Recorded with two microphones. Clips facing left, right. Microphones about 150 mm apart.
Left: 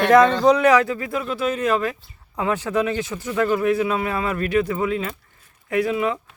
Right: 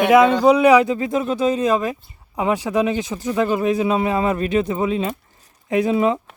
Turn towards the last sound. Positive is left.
turn(degrees=-25)  # may be behind; listen again after turning